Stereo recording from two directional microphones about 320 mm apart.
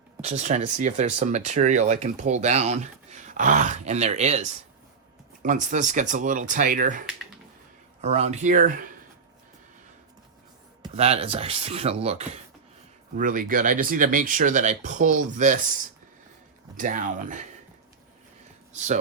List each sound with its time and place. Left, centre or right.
0.2 s speech: right
8.0 s speech: centre
10.8 s speech: centre
16.7 s speech: right
18.7 s speech: right